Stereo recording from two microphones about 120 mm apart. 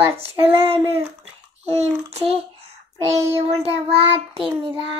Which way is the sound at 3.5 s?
55° right (ahead or behind).